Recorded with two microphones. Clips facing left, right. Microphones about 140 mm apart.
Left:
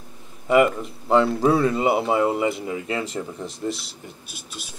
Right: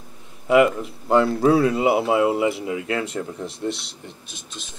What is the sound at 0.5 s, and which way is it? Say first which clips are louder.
Speech: right 1 dB; centre (ahead or behind).